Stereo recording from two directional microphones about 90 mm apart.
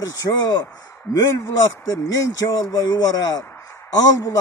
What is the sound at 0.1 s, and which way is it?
Speech, 45° left (ahead or behind).